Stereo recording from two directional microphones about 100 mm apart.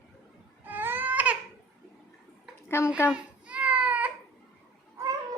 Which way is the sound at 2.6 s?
25° left (ahead or behind).